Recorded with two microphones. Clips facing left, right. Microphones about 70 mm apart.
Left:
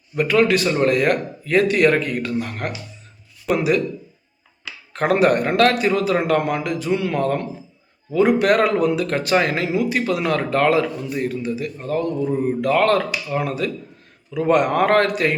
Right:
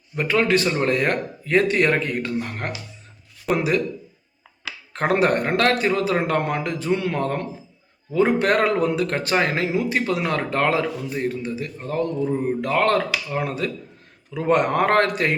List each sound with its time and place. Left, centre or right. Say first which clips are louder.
0.2 s a man's voice: left 3 dB; right
4.9 s a man's voice: left 3 dB; right